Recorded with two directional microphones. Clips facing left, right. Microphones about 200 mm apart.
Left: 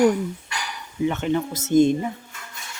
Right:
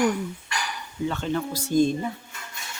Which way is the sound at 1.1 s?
20° left (ahead or behind).